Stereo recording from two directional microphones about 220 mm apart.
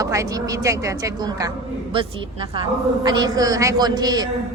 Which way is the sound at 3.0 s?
20° right (ahead or behind).